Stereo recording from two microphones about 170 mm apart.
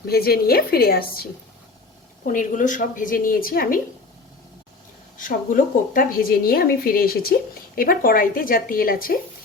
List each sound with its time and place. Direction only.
0.0 s a woman's voice: 65° left (ahead or behind)
2.2 s a woman's voice: 50° left (ahead or behind)
5.1 s a woman's voice: 50° left (ahead or behind)